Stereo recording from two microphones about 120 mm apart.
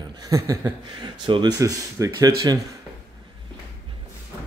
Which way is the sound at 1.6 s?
30° right (ahead or behind).